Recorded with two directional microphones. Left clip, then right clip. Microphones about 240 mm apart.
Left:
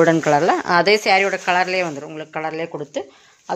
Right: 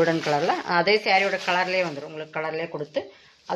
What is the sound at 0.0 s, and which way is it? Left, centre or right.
Speech, left.